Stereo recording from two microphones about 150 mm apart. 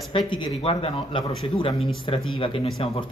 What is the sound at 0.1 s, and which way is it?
Speech, 35° left (ahead or behind).